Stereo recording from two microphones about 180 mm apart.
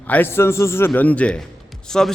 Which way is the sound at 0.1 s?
10° left (ahead or behind).